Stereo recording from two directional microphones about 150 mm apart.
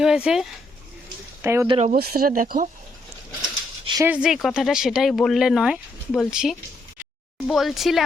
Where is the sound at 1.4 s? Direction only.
15° right (ahead or behind).